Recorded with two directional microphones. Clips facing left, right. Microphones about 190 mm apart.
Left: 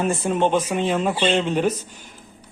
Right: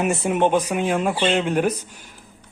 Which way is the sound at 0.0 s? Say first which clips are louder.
Right 1 dB; 15° right (ahead or behind).